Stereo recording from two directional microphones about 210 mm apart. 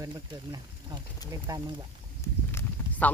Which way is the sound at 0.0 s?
20° right (ahead or behind).